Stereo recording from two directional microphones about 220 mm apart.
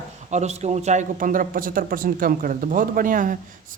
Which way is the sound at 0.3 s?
30° right (ahead or behind).